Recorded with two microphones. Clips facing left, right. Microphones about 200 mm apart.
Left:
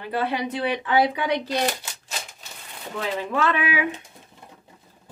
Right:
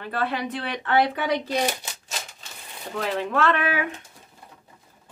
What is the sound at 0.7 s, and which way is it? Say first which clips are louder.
Speech: left 1 dB; centre (ahead or behind).